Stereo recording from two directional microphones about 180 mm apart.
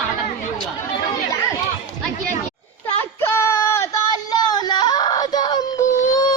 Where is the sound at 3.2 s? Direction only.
15° left (ahead or behind).